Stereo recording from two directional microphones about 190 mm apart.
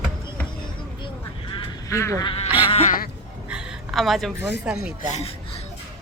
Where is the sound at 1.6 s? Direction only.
15° left (ahead or behind).